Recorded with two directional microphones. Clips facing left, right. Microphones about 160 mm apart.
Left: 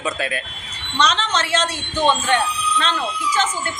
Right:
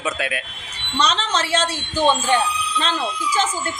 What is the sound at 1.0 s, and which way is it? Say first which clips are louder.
Speech: left 2 dB; 30° right (ahead or behind).